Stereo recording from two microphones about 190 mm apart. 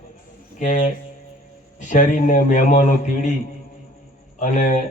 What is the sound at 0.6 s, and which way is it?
A man's voice, 40° left (ahead or behind).